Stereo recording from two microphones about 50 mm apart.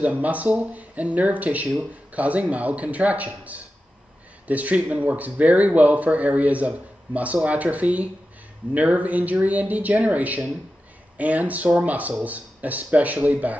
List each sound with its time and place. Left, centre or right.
0.0 s speech: right